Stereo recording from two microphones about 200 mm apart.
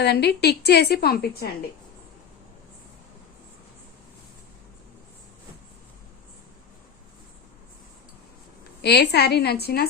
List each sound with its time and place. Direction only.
0.0 s a woman's voice: 55° left (ahead or behind)
8.8 s a woman's voice: 55° left (ahead or behind)